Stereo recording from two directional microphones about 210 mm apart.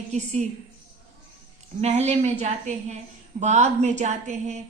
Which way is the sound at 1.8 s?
35° right (ahead or behind).